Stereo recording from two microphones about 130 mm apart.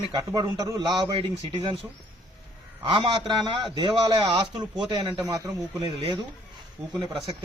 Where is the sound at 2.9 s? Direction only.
40° right (ahead or behind).